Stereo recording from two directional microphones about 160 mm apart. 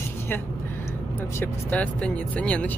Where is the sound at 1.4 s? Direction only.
10° left (ahead or behind).